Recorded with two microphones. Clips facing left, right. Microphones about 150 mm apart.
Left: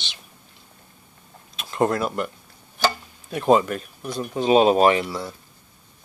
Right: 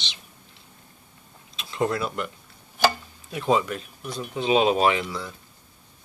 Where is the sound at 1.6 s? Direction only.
50° left (ahead or behind).